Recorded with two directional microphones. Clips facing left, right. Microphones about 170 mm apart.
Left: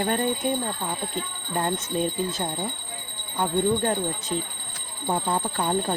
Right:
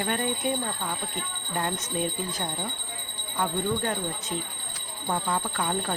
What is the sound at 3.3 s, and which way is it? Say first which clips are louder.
Speech: left 4 dB; 30° left (ahead or behind).